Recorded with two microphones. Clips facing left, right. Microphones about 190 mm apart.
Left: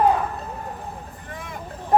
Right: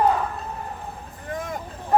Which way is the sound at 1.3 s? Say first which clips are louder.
Right 8 dB; 45° right (ahead or behind).